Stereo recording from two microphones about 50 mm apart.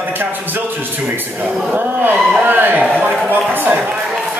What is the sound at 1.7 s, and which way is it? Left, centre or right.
Speech, right.